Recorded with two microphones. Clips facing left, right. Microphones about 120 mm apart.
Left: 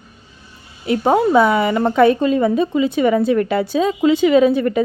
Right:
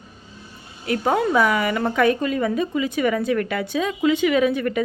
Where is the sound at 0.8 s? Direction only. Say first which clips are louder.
Left 5 dB; 25° left (ahead or behind).